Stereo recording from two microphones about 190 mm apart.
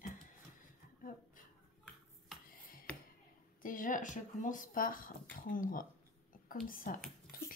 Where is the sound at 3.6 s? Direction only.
45° left (ahead or behind).